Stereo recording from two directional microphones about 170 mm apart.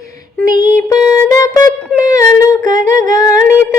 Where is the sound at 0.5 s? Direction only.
20° left (ahead or behind).